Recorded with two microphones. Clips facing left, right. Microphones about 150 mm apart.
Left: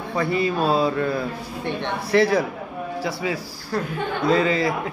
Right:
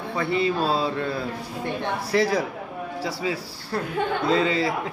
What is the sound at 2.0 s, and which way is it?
A man's voice, 35° right (ahead or behind).